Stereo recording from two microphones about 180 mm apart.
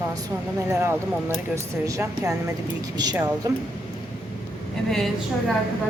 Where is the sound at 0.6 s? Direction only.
15° right (ahead or behind).